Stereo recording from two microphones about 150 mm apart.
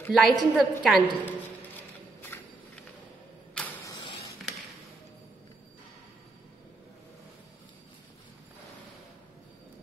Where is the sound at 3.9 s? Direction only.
25° left (ahead or behind).